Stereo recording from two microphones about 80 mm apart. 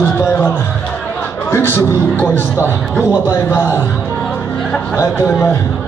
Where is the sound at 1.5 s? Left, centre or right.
Left.